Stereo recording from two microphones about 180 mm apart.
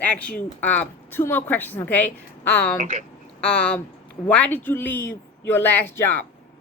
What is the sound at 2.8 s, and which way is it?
Speech, 45° right (ahead or behind).